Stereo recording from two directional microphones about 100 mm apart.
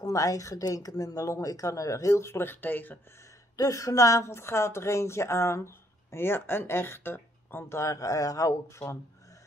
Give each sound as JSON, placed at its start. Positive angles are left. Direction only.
{"t": 0.0, "sound": "speech", "side_deg": 35}
{"t": 3.5, "sound": "speech", "side_deg": 35}